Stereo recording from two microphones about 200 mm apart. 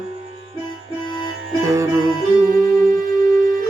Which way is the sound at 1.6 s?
15° right (ahead or behind).